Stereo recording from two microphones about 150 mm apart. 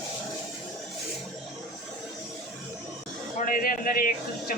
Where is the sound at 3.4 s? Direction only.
70° left (ahead or behind).